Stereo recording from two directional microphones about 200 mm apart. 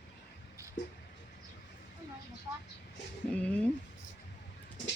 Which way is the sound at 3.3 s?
5° left (ahead or behind).